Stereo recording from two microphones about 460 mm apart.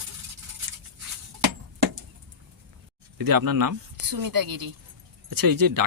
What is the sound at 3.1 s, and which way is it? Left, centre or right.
Speech, right.